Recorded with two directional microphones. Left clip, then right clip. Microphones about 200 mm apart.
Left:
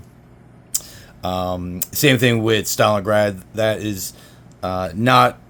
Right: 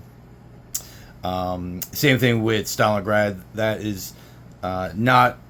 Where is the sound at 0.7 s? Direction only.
25° left (ahead or behind).